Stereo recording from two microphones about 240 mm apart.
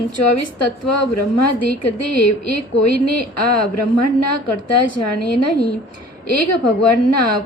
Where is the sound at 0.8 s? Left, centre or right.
Left.